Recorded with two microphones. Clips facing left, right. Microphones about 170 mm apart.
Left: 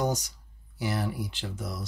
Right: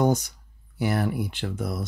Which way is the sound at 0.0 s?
55° right (ahead or behind).